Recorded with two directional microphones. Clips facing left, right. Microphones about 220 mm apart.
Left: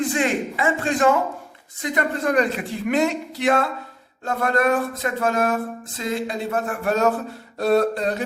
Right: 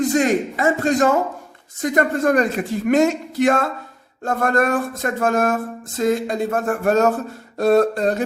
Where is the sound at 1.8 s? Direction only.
45° right (ahead or behind).